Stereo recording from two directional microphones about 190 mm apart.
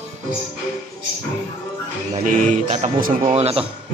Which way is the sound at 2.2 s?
40° right (ahead or behind).